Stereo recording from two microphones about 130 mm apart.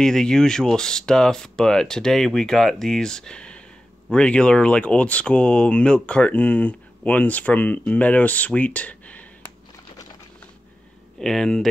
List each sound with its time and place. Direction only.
0.0 s speech: 5° left (ahead or behind)
11.1 s speech: 5° left (ahead or behind)